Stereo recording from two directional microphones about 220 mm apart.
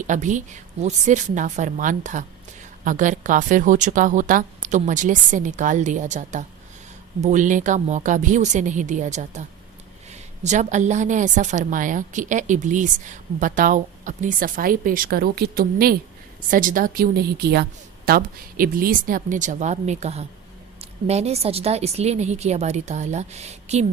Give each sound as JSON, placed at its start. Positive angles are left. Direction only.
{"t": 0.0, "sound": "a woman's voice", "side_deg": -35}